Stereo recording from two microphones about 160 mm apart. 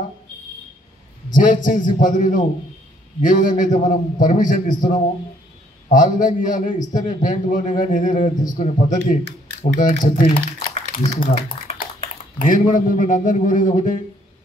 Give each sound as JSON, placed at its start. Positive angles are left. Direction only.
{"t": 1.3, "sound": "a man's voice", "side_deg": 55}
{"t": 12.4, "sound": "a man's voice", "side_deg": 55}